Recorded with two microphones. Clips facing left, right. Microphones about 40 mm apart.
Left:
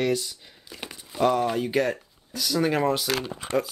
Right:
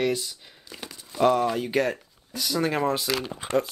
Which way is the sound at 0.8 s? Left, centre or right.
Left.